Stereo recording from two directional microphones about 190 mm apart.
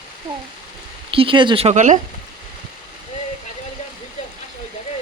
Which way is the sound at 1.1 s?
25° right (ahead or behind).